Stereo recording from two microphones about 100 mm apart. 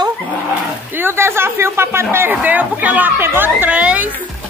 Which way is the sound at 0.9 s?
25° right (ahead or behind).